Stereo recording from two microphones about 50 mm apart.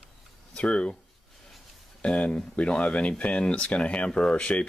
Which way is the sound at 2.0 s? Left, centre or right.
Left.